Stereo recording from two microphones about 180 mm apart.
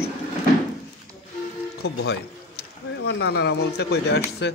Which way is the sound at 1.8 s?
65° left (ahead or behind).